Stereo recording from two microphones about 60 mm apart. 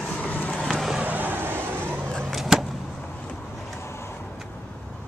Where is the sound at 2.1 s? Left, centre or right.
Centre.